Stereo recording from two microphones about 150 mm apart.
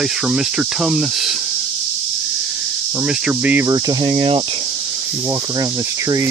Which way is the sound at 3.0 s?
10° right (ahead or behind).